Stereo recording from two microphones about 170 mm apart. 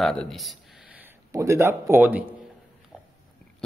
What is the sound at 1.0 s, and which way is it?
A man's voice, 15° right (ahead or behind).